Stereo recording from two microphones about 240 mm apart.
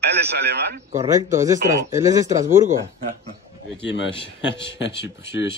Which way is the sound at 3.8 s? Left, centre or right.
Left.